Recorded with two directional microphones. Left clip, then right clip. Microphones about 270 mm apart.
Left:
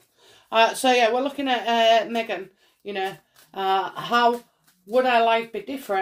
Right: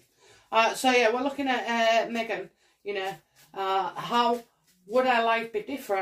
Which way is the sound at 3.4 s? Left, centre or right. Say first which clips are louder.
Left 4 dB; left.